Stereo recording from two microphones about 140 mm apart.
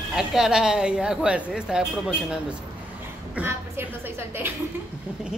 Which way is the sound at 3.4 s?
15° right (ahead or behind).